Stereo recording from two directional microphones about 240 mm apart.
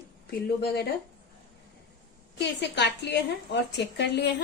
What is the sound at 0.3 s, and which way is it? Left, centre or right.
Speech, left.